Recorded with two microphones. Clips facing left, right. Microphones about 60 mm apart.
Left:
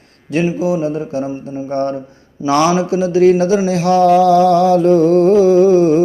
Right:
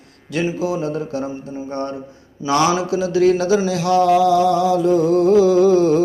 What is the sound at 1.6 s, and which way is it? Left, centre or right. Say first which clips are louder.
A man's voice: left 8 dB; left.